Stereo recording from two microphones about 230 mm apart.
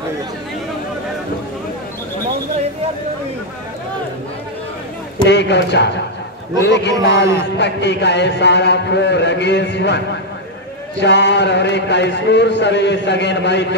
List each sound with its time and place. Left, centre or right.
5.3 s a man's voice: left